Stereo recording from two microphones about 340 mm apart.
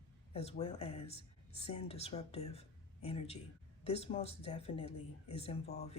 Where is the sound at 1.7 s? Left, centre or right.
Centre.